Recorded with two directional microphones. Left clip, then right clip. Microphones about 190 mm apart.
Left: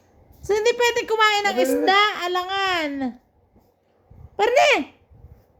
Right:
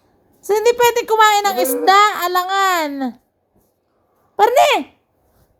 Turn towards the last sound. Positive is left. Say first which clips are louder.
# right 5 dB
turn(degrees=-15)  # may be behind; listen again after turning